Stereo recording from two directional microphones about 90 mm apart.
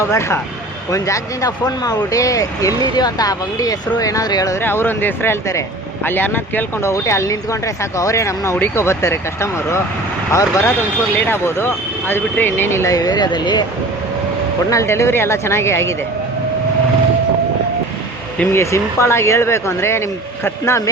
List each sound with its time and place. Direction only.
0.1 s speech: 30° left (ahead or behind)
4.5 s speech: 25° left (ahead or behind)
6.9 s speech: 30° left (ahead or behind)
13.0 s speech: 50° left (ahead or behind)
14.7 s speech: 35° left (ahead or behind)
18.5 s speech: 30° left (ahead or behind)